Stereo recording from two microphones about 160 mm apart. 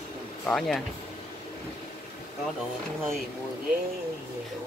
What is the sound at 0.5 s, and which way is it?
Speech, centre (ahead or behind).